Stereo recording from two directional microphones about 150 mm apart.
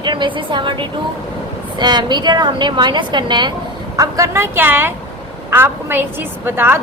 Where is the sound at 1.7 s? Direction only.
30° right (ahead or behind).